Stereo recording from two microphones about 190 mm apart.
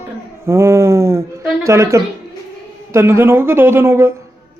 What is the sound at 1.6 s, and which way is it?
Speech, 15° right (ahead or behind).